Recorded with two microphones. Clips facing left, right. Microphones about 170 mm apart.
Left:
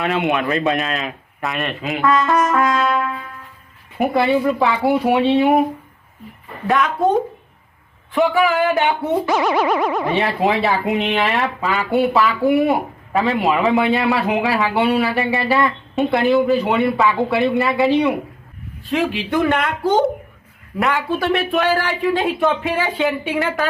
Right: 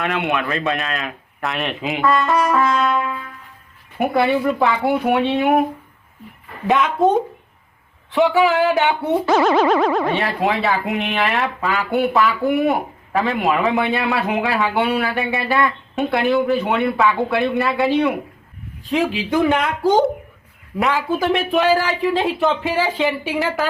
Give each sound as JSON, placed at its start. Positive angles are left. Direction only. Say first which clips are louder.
{"t": 0.6, "sound": "boing", "louder": "left 3 dB", "side_deg": 15}
{"t": 0.9, "sound": "speech", "louder": "left 2 dB", "side_deg": 0}
{"t": 6.7, "sound": "speech", "louder": "even", "side_deg": 0}
{"t": 9.6, "sound": "boing", "louder": "right 2 dB", "side_deg": 10}
{"t": 10.4, "sound": "speech", "louder": "left 1 dB", "side_deg": 0}
{"t": 18.9, "sound": "speech", "louder": "even", "side_deg": -5}